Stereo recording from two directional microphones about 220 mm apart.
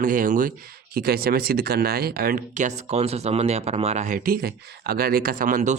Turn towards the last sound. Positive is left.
turn(degrees=-35)  # may be behind; listen again after turning